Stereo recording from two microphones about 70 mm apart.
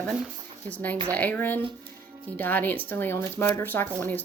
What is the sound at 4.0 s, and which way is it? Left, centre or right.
Speech, left.